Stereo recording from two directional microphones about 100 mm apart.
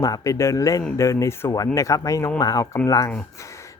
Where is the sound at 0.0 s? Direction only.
35° left (ahead or behind).